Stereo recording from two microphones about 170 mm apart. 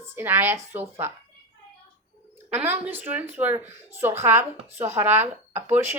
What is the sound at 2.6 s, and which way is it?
A woman's voice, 10° right (ahead or behind).